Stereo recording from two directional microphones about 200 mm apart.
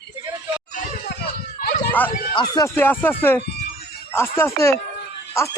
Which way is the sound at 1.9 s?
10° left (ahead or behind).